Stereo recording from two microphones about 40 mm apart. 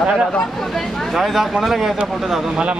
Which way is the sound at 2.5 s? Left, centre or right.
Right.